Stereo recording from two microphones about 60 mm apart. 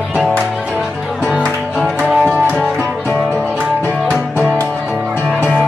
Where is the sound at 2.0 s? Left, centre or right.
Left.